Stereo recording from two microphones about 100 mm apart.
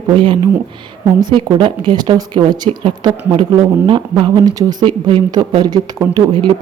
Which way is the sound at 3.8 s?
50° right (ahead or behind).